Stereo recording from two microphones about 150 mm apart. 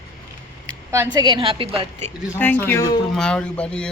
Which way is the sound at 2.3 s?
15° left (ahead or behind).